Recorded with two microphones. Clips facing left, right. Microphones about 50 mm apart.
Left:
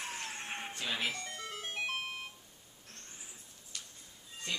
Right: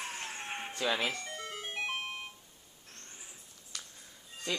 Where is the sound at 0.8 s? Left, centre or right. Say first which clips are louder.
Right 7 dB; right.